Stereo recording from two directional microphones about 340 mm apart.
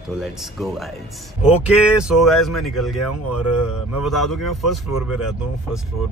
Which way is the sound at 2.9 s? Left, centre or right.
Left.